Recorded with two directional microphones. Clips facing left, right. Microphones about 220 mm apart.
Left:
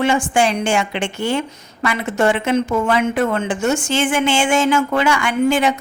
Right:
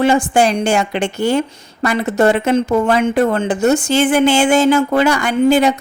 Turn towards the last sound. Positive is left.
turn(degrees=-35)  # may be behind; listen again after turning